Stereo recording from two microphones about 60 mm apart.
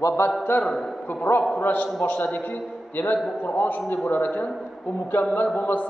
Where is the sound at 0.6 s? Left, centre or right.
Centre.